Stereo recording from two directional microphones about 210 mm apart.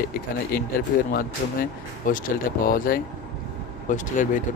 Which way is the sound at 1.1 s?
40° left (ahead or behind).